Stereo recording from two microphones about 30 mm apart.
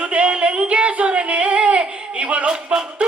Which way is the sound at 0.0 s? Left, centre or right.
Right.